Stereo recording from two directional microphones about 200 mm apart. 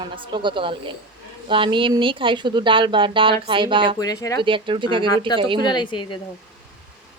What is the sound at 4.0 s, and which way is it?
Speech, 15° left (ahead or behind).